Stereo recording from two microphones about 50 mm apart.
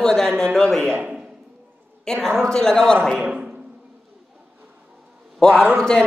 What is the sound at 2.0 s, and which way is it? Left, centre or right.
Speech, centre.